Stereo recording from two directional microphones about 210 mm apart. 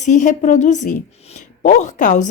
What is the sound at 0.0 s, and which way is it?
A woman's voice, 35° left (ahead or behind).